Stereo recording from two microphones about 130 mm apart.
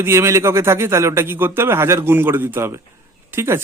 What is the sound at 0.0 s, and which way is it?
Speech, 20° right (ahead or behind).